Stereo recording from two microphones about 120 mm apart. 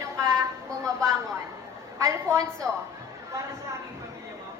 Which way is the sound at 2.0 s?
25° right (ahead or behind).